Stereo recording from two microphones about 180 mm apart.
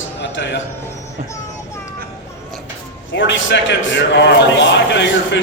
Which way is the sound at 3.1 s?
90° left.